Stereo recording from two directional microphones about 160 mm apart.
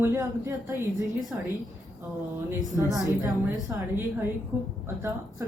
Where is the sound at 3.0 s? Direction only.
20° left (ahead or behind).